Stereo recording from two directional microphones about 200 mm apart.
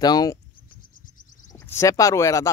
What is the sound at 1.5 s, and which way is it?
Speech, 15° left (ahead or behind).